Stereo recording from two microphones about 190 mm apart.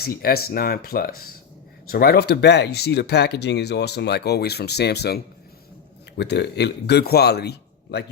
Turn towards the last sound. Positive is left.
turn(degrees=60)  # may be behind; listen again after turning